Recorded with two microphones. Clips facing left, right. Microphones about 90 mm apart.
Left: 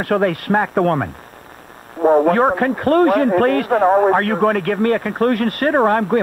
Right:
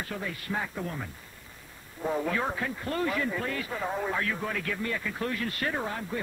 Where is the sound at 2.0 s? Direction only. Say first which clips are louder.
Left 17 dB; 55° left (ahead or behind).